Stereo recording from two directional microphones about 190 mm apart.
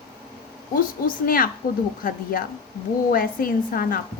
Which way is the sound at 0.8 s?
45° left (ahead or behind).